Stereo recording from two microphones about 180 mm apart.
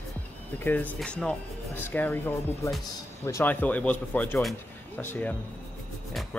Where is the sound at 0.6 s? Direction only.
10° left (ahead or behind).